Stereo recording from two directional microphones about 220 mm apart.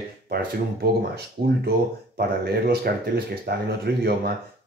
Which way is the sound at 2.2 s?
45° right (ahead or behind).